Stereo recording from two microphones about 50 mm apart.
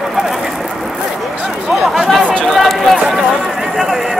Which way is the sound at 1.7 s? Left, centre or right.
Centre.